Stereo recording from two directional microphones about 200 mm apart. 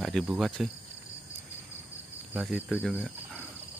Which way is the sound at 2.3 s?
5° right (ahead or behind).